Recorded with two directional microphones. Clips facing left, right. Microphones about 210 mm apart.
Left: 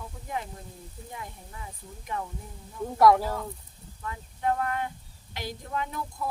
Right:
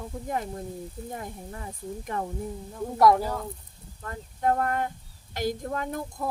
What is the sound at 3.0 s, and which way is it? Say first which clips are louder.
Speech: even; centre (ahead or behind).